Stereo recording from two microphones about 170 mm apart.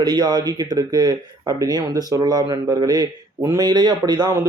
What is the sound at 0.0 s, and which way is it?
Speech, 25° right (ahead or behind).